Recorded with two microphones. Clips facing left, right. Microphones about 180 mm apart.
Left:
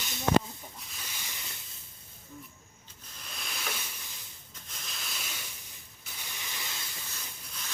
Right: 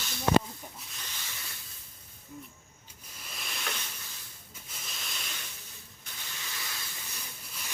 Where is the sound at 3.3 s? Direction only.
Centre (ahead or behind).